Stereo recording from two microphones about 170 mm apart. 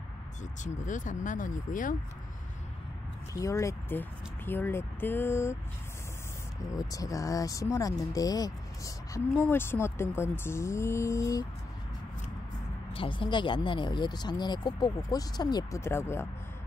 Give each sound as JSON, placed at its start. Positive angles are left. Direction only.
{"t": 0.7, "sound": "speech", "side_deg": 45}
{"t": 3.3, "sound": "speech", "side_deg": 20}
{"t": 6.7, "sound": "speech", "side_deg": 20}
{"t": 12.9, "sound": "speech", "side_deg": 30}